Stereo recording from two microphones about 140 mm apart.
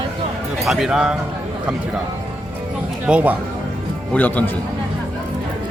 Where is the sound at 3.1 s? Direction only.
10° right (ahead or behind).